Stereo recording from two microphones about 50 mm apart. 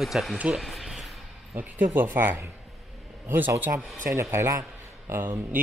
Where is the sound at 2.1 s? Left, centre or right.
Right.